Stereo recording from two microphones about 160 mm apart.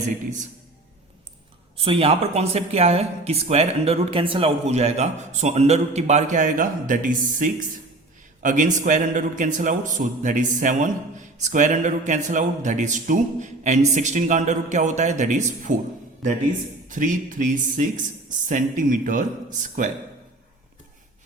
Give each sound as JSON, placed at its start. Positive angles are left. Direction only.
{"t": 1.7, "sound": "speech", "side_deg": -35}
{"t": 16.9, "sound": "speech", "side_deg": -55}